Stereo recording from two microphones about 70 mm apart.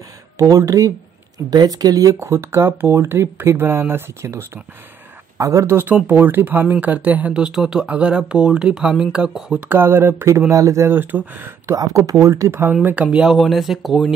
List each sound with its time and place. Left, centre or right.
0.4 s speech: right
1.5 s speech: right
2.1 s speech: right
5.4 s speech: right
6.1 s speech: right; by 9.6 s centre
9.7 s speech: right
10.5 s speech: right
10.9 s speech: right
11.6 s speech: right
12.8 s speech: centre
13.2 s speech: centre